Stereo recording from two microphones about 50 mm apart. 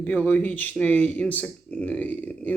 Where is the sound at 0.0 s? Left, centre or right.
Left.